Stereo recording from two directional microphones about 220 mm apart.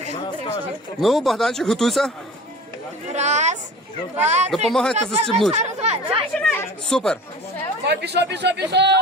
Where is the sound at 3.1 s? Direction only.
30° right (ahead or behind).